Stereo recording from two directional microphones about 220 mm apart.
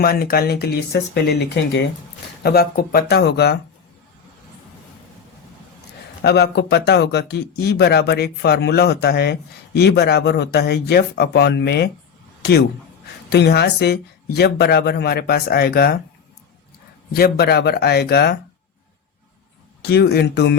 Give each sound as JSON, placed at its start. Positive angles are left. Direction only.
{"t": 0.0, "sound": "a man's voice", "side_deg": 45}
{"t": 6.2, "sound": "a man's voice", "side_deg": 50}
{"t": 12.4, "sound": "a sound", "side_deg": 45}
{"t": 13.3, "sound": "a man's voice", "side_deg": 50}
{"t": 17.1, "sound": "a man's voice", "side_deg": 45}
{"t": 19.8, "sound": "a man's voice", "side_deg": 45}